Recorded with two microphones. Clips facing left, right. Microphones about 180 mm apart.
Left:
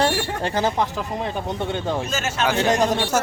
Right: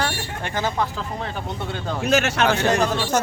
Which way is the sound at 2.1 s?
70° right (ahead or behind).